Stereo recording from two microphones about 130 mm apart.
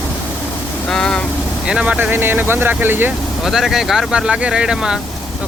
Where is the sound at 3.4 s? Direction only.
Centre (ahead or behind).